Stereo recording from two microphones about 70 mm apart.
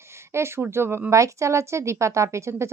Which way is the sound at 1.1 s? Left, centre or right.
Right.